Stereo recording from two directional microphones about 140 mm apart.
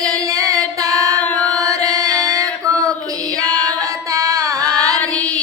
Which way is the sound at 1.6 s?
25° right (ahead or behind).